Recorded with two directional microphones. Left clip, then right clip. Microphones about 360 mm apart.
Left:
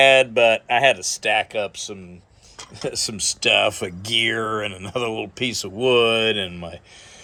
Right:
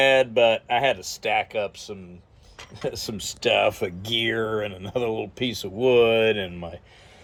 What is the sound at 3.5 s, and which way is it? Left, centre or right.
Speech, left.